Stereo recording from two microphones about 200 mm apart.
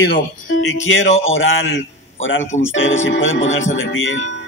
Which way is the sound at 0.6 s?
85° left.